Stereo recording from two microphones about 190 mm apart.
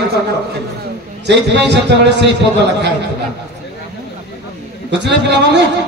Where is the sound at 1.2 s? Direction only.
65° right (ahead or behind).